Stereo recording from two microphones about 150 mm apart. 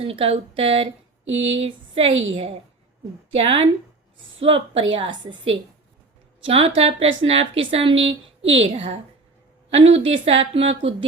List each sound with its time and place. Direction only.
0.0 s speech: 40° right (ahead or behind)